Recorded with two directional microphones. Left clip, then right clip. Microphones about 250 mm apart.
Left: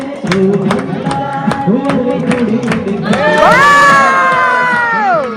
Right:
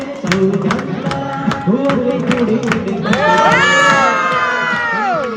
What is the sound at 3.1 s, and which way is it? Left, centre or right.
Crowd, centre.